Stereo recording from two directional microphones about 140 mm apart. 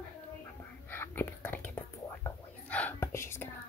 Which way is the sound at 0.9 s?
15° left (ahead or behind).